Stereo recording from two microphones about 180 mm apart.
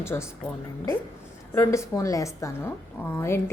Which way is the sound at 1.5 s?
15° left (ahead or behind).